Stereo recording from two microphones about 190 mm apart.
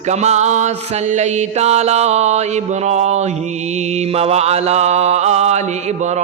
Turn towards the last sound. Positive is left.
turn(degrees=-35)  # may be behind; listen again after turning